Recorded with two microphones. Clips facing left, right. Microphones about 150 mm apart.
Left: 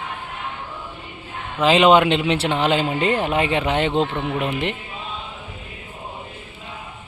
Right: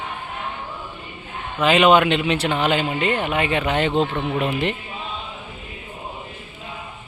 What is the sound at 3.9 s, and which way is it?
Speech, 10° right (ahead or behind).